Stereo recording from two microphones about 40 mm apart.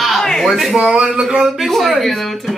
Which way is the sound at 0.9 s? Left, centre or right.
Right.